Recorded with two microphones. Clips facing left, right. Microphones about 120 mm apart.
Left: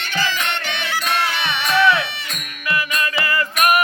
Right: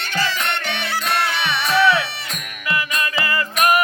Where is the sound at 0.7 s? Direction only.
Centre (ahead or behind).